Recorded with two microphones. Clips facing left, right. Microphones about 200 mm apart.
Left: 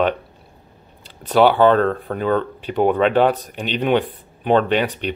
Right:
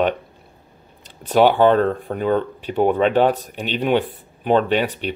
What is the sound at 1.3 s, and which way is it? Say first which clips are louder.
Speech: even; 15° right (ahead or behind).